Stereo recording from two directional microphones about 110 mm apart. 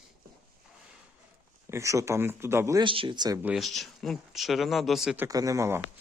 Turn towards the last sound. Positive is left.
turn(degrees=-25)  # may be behind; listen again after turning